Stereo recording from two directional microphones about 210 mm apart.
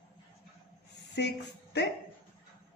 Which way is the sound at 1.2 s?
55° left (ahead or behind).